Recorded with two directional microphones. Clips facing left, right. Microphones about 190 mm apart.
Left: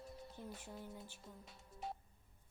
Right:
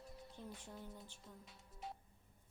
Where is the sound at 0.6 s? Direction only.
10° left (ahead or behind).